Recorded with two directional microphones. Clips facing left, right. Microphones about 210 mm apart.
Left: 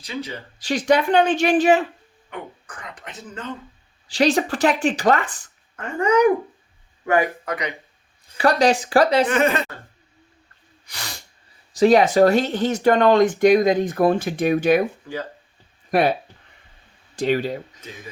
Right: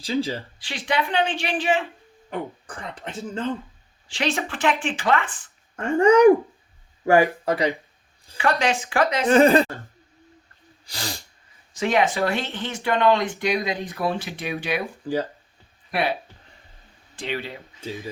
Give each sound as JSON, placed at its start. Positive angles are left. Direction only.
{"t": 0.0, "sound": "speech", "side_deg": -30}
{"t": 0.6, "sound": "speech", "side_deg": 45}
{"t": 2.3, "sound": "speech", "side_deg": -30}
{"t": 4.1, "sound": "speech", "side_deg": 35}
{"t": 5.7, "sound": "speech", "side_deg": -30}
{"t": 8.4, "sound": "speech", "side_deg": 35}
{"t": 9.2, "sound": "speech", "side_deg": -30}
{"t": 10.8, "sound": "sneeze", "side_deg": -30}
{"t": 11.7, "sound": "speech", "side_deg": 35}
{"t": 15.1, "sound": "speech", "side_deg": -30}
{"t": 15.9, "sound": "speech", "side_deg": 45}
{"t": 17.2, "sound": "speech", "side_deg": 45}